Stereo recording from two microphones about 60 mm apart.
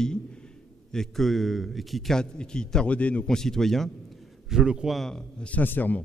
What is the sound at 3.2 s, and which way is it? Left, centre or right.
A man's voice, centre.